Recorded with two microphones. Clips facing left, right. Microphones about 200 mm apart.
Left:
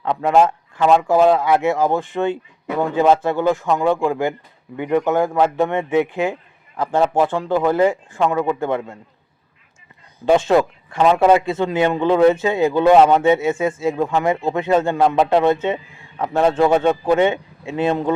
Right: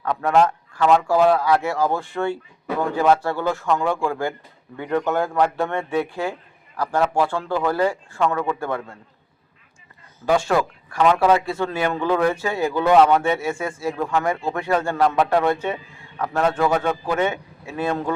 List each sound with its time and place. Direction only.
0.0 s a man's voice: 20° left (ahead or behind)
10.2 s speech: 20° left (ahead or behind)